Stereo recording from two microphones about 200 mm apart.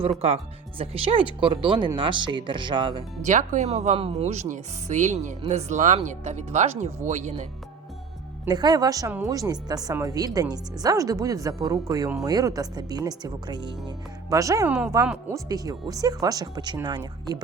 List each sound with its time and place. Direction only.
0.0 s a woman's voice: 30° right (ahead or behind)
3.2 s speech: 40° right (ahead or behind)
8.4 s a woman's voice: 20° right (ahead or behind)